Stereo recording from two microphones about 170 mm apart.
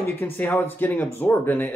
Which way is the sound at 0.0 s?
10° left (ahead or behind).